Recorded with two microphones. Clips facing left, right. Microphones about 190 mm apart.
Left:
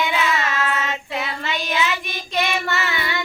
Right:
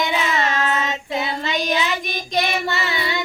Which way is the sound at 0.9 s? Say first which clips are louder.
Right 2 dB; 20° right (ahead or behind).